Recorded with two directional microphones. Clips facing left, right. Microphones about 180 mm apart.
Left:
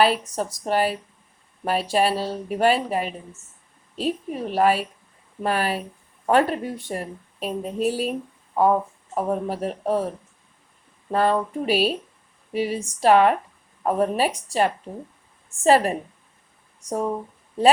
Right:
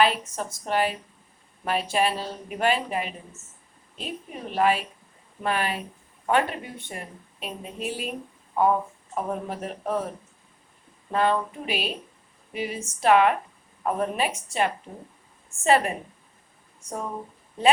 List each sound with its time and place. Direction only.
0.0 s speech: 35° left (ahead or behind)
9.1 s speech: 35° left (ahead or behind)
11.1 s speech: 35° left (ahead or behind)